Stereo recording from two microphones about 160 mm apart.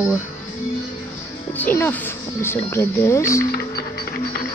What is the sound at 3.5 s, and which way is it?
Music, 75° left (ahead or behind).